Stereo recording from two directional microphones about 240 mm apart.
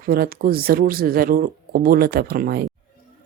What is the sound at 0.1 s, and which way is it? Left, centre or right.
Speech, right.